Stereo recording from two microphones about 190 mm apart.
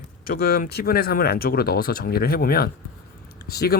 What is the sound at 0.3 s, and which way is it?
Speech, 55° left (ahead or behind).